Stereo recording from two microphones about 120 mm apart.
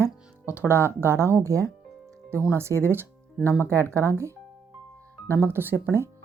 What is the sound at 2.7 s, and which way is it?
Speech, 25° left (ahead or behind).